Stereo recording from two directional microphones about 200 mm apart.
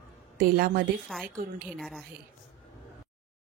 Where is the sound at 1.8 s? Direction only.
Centre (ahead or behind).